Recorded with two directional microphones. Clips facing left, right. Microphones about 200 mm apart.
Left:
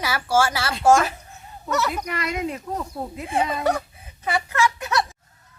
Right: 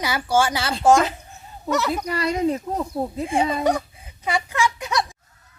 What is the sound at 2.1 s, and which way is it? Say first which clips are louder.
Speech: right 5 dB; 30° right (ahead or behind).